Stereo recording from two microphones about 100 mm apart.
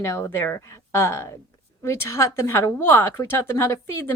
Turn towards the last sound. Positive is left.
turn(degrees=25)  # may be behind; listen again after turning